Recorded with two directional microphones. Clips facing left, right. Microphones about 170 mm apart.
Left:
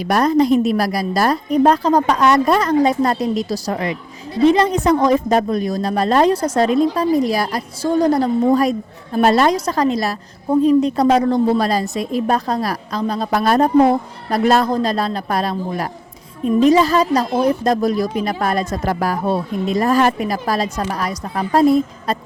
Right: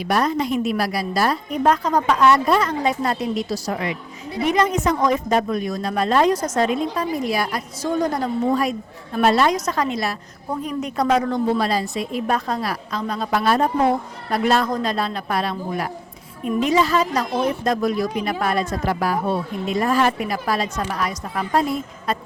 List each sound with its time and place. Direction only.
0.0 s a woman's voice: 40° left (ahead or behind)